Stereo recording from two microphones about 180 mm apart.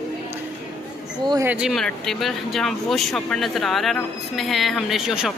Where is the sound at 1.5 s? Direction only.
5° right (ahead or behind).